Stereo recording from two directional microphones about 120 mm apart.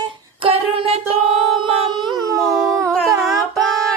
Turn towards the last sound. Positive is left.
turn(degrees=0)  # may be behind; listen again after turning